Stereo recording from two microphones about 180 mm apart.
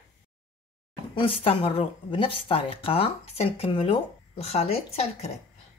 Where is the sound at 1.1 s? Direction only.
30° left (ahead or behind).